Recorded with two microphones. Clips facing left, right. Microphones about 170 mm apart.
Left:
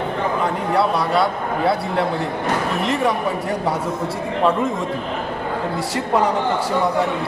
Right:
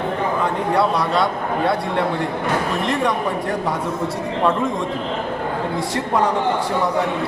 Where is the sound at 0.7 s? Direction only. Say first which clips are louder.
Even; centre (ahead or behind).